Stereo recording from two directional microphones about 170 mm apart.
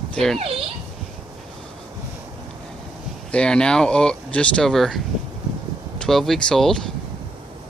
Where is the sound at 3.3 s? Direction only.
5° left (ahead or behind).